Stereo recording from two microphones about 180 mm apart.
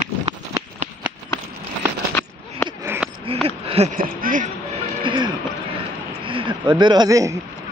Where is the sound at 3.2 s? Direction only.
35° right (ahead or behind).